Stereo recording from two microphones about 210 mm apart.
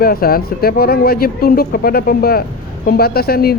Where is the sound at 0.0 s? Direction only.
45° left (ahead or behind).